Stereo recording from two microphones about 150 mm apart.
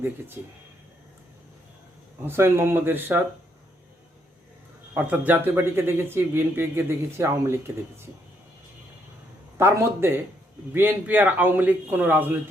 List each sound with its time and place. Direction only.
0.4 s speech: 15° right (ahead or behind)
2.2 s speech: 15° right (ahead or behind)
4.9 s speech: 10° right (ahead or behind)
9.6 s speech: 15° right (ahead or behind)